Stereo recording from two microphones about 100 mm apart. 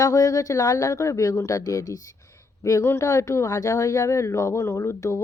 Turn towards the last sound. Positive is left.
turn(degrees=25)  # may be behind; listen again after turning